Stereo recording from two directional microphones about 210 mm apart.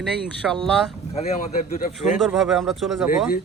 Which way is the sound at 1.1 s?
30° left (ahead or behind).